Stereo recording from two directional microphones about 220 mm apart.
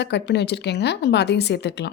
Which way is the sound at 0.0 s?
50° left (ahead or behind).